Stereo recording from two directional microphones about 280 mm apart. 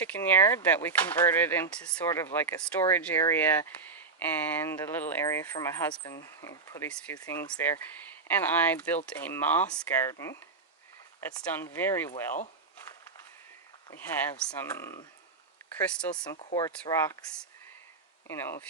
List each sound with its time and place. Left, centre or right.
0.2 s speech: centre
13.9 s speech: centre
16.2 s speech: centre
18.3 s speech: centre